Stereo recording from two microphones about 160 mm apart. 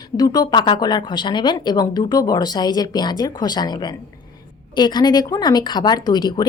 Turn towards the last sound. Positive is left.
turn(degrees=25)  # may be behind; listen again after turning